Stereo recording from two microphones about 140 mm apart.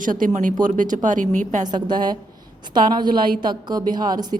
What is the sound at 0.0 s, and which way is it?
Speech, 75° right (ahead or behind).